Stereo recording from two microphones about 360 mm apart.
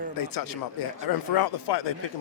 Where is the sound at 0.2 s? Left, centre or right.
Left.